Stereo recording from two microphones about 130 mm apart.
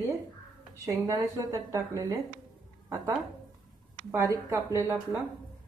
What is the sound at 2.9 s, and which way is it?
A woman's voice, 15° right (ahead or behind).